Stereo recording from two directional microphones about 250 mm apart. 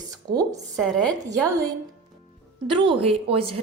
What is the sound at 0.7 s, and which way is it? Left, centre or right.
Speech, centre.